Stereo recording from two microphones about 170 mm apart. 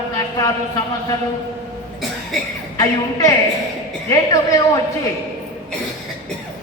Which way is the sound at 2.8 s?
20° left (ahead or behind).